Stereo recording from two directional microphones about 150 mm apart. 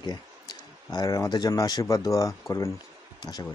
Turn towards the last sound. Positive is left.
turn(degrees=25)  # may be behind; listen again after turning